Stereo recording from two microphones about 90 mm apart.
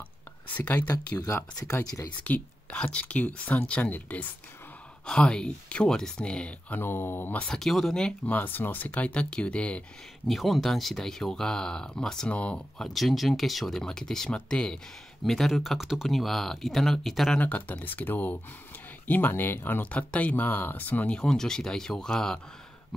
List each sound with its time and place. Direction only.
1.2 s speech: 30° left (ahead or behind)
2.2 s speech: 15° left (ahead or behind)
6.8 s speech: 25° left (ahead or behind)
7.4 s speech: 5° left (ahead or behind)
8.3 s speech: 20° left (ahead or behind)
10.2 s speech: centre (ahead or behind)
12.8 s speech: centre (ahead or behind)
17.4 s speech: 15° left (ahead or behind)
21.2 s speech: 5° left (ahead or behind)